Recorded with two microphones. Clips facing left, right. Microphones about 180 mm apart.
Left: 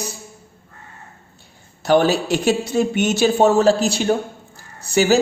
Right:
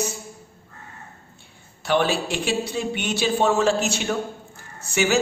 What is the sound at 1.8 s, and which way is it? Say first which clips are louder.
Speech: left 6 dB; 40° left (ahead or behind).